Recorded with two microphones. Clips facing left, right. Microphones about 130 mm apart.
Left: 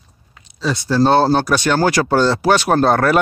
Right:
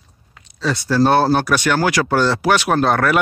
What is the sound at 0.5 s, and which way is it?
Speech, 15° left (ahead or behind).